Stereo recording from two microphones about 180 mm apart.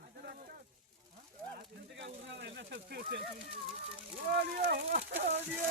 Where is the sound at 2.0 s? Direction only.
75° right (ahead or behind).